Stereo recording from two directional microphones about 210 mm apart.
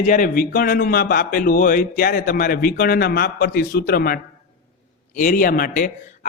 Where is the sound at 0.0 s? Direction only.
40° left (ahead or behind).